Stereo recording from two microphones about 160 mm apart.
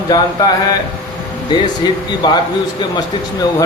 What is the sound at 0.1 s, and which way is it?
Speech, 25° left (ahead or behind).